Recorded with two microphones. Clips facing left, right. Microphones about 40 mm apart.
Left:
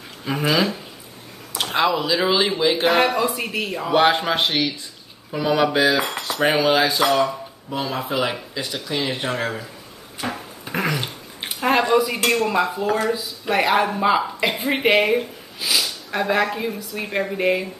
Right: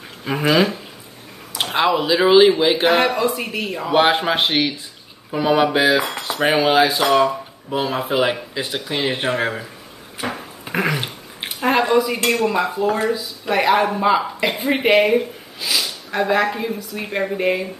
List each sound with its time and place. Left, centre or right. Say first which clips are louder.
0.2 s speech: right 3 dB; centre
1.6 s speech: right 2 dB; centre
3.0 s speech: right 1 dB; centre
3.9 s speech: right 1 dB; centre
6.2 s cutlery: even; centre
7.2 s speech: right 4 dB; right
10.1 s a sound: right 2 dB; right
11.4 s a sound: right 1 dB; centre
11.9 s speech: right 1 dB; centre